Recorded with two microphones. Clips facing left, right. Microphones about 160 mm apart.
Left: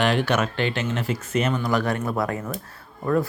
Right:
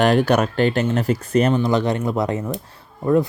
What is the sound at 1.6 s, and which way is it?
Speech, 20° right (ahead or behind).